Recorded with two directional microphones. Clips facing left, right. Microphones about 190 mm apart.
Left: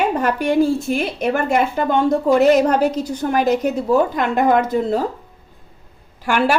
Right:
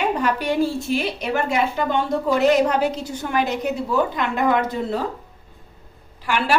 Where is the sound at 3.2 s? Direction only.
40° left (ahead or behind).